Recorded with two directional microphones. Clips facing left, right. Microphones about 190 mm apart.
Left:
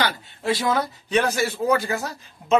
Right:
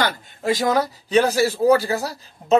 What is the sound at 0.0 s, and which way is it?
Speech, 45° right (ahead or behind).